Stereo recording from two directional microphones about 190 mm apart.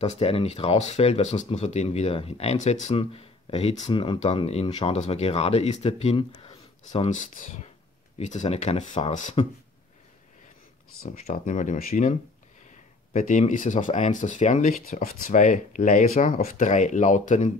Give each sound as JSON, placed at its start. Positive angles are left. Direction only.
{"t": 0.0, "sound": "speech", "side_deg": 35}
{"t": 7.2, "sound": "speech", "side_deg": 45}
{"t": 11.2, "sound": "speech", "side_deg": 40}